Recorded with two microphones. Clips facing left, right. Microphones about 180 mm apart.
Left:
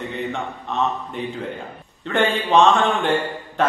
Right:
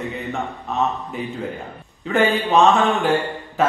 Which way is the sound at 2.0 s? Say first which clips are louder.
Right 2 dB; 5° right (ahead or behind).